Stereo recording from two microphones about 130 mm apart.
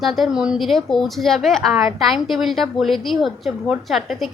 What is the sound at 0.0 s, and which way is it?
A woman's voice, centre (ahead or behind).